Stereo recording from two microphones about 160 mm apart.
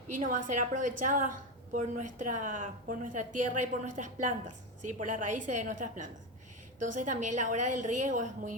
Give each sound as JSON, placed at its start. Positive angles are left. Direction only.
{"t": 0.2, "sound": "a woman's voice", "side_deg": -55}